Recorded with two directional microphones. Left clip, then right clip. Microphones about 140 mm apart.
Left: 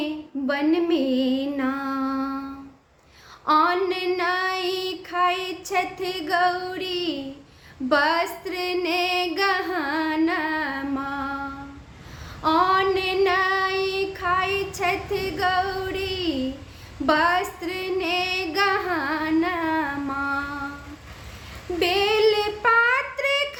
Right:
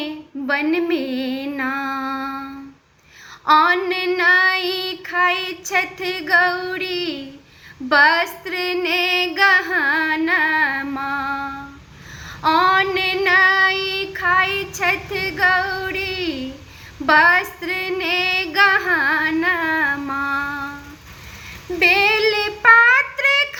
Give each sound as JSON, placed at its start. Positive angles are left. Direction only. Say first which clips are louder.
{"t": 0.0, "sound": "female singing", "louder": "even", "side_deg": 45}
{"t": 3.4, "sound": "female singing", "louder": "right 5 dB", "side_deg": 45}
{"t": 12.5, "sound": "female singing", "louder": "right 4 dB", "side_deg": 45}
{"t": 19.9, "sound": "music", "louder": "right 5 dB", "side_deg": 20}
{"t": 21.8, "sound": "child singing", "louder": "right 6 dB", "side_deg": 45}